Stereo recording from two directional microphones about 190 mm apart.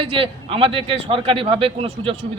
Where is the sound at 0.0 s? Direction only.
30° right (ahead or behind).